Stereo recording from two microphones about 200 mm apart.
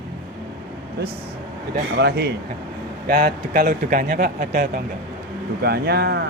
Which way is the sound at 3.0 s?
45° right (ahead or behind).